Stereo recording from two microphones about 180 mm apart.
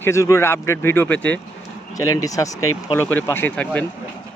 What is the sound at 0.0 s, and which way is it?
Speech, 15° left (ahead or behind).